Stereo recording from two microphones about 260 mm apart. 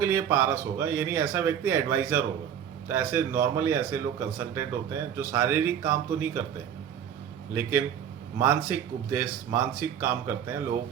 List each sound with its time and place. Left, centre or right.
0.0 s speech: centre
7.5 s speech: centre